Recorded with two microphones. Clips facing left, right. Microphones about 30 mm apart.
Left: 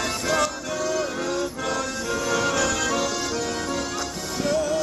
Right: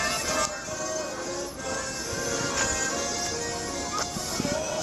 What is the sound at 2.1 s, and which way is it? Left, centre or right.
Music, left.